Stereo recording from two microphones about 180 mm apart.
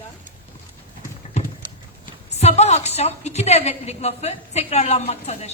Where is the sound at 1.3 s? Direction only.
40° left (ahead or behind).